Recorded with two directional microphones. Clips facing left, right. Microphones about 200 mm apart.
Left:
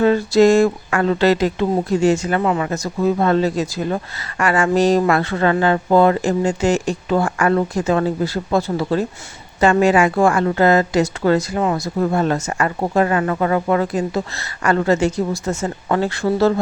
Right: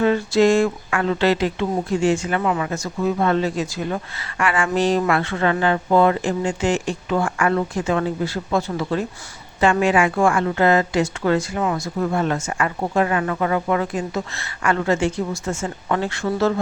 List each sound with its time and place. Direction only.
0.0 s speech: 40° left (ahead or behind)